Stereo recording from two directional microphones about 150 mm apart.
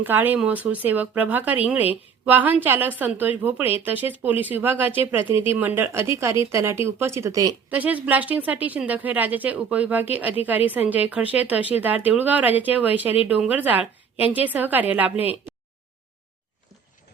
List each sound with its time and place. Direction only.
0.0 s speech: 10° right (ahead or behind)
7.7 s speech: 10° right (ahead or behind)